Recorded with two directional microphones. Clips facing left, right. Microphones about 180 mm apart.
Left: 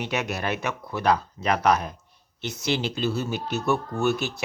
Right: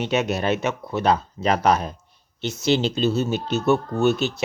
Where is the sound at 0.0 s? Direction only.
25° right (ahead or behind).